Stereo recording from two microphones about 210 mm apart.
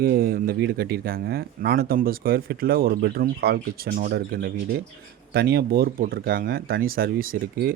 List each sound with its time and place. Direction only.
0.0 s speech: 45° right (ahead or behind)